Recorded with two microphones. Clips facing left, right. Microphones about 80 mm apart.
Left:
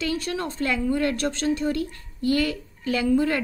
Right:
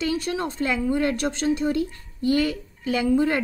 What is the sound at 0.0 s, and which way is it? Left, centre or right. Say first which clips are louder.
A woman's voice: right 2 dB; right.